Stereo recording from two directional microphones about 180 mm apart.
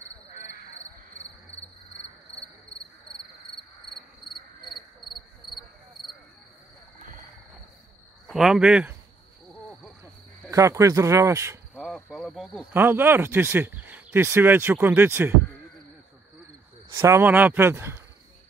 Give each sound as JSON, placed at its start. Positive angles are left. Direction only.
{"t": 8.3, "sound": "speech", "side_deg": 0}
{"t": 9.5, "sound": "cricket", "side_deg": 0}
{"t": 10.5, "sound": "speech", "side_deg": -15}
{"t": 11.7, "sound": "cricket", "side_deg": 0}
{"t": 12.7, "sound": "speech", "side_deg": -10}
{"t": 17.0, "sound": "speech", "side_deg": -10}